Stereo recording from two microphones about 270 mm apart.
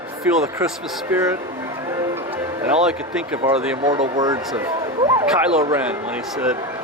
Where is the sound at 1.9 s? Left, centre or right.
Centre.